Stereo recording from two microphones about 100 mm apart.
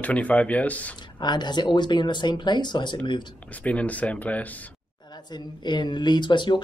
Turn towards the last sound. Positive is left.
turn(degrees=50)  # may be behind; listen again after turning